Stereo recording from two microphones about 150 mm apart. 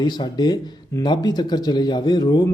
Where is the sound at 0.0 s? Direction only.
30° left (ahead or behind).